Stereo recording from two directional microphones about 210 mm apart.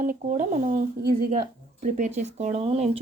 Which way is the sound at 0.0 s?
40° right (ahead or behind).